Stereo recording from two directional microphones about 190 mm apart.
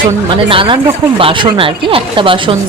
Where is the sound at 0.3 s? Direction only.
25° right (ahead or behind).